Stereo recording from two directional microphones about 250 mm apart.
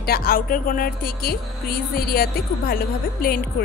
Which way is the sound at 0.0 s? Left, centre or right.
Left.